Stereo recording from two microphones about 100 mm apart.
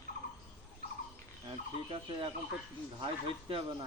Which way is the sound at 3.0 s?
60° right (ahead or behind).